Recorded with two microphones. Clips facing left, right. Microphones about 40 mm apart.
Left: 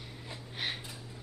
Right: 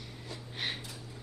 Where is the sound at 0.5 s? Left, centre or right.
Centre.